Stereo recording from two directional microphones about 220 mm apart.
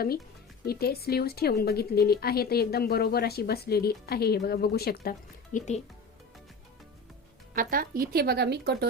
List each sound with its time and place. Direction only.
0.6 s a woman's voice: 45° left (ahead or behind)
5.5 s speech: 30° left (ahead or behind)
7.5 s speech: 40° right (ahead or behind)